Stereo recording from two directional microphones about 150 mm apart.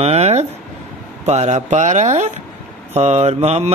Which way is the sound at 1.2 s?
45° right (ahead or behind).